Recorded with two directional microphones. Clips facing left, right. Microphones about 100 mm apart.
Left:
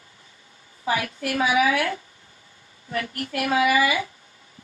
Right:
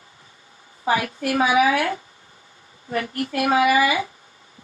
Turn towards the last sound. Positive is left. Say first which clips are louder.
# right 2 dB
turn(degrees=-30)  # may be behind; listen again after turning